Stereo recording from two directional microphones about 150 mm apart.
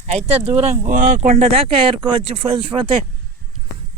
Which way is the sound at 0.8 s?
60° right (ahead or behind).